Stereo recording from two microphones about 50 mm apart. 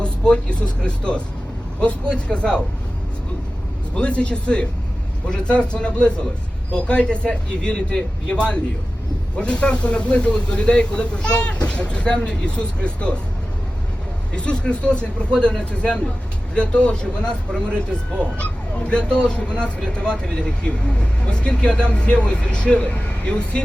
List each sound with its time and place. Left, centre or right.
0.0 s speech: centre
3.9 s speech: left
14.3 s speech: centre